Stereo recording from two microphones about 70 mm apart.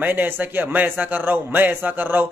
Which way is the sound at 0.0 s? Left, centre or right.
Right.